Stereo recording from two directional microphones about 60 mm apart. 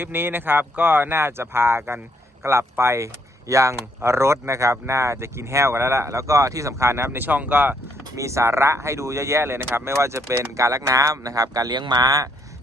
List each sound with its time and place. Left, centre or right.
0.0 s speech: right
7.3 s speech: right
8.1 s speech: right
11.5 s speech: right